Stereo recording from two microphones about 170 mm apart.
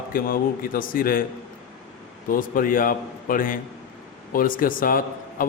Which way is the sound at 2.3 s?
55° left (ahead or behind).